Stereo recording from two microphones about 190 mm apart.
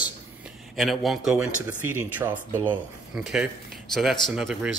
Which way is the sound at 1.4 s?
10° right (ahead or behind).